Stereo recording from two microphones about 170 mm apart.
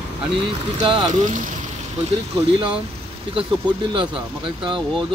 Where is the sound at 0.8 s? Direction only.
30° right (ahead or behind).